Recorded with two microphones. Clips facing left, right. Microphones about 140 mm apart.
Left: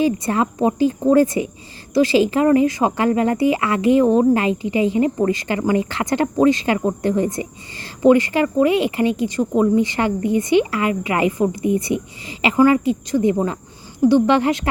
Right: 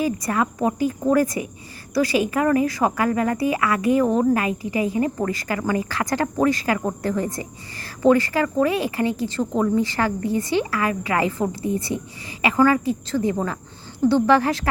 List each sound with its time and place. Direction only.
0.0 s speech: 25° left (ahead or behind)